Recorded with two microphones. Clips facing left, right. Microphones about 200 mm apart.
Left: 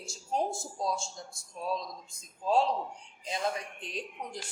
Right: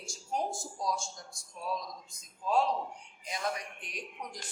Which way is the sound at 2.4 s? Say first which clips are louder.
Left 2 dB; 30° left (ahead or behind).